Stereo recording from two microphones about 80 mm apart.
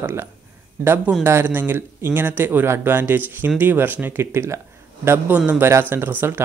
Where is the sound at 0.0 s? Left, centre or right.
Right.